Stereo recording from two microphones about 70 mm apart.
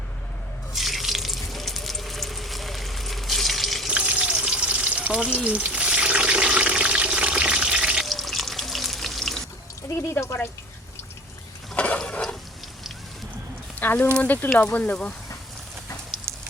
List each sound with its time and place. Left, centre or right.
0.7 s water tap: centre
3.8 s water: centre
8.0 s water: centre
10.1 s speech: left
11.7 s a sound: centre
13.7 s a sound: left
14.2 s speech: left